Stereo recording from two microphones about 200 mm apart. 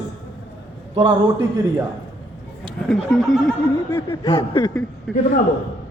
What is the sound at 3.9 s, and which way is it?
Speech, 15° left (ahead or behind).